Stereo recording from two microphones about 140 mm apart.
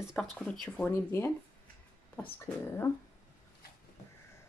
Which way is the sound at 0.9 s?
15° left (ahead or behind).